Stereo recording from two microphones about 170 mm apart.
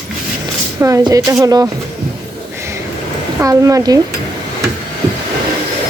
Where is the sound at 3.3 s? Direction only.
20° right (ahead or behind).